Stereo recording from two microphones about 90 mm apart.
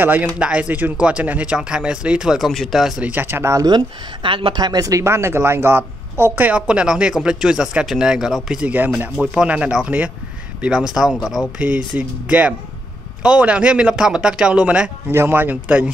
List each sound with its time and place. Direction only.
0.0 s speech: 20° right (ahead or behind); by 2.9 s centre (ahead or behind)
3.0 s speech: 20° right (ahead or behind)
3.5 s speech: 55° right (ahead or behind); by 14.9 s 10° right (ahead or behind)
15.0 s speech: 25° right (ahead or behind)